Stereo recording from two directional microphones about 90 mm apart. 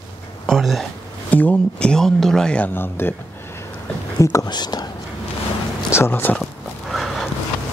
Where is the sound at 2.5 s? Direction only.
20° left (ahead or behind).